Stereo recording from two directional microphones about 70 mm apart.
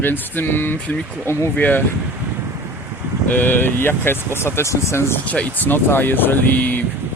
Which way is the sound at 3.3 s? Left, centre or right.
Left.